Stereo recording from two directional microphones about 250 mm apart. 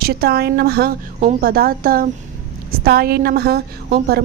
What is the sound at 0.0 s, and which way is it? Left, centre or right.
Speech, right.